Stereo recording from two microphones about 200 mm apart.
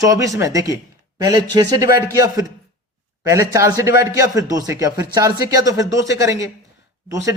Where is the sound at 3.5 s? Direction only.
15° right (ahead or behind).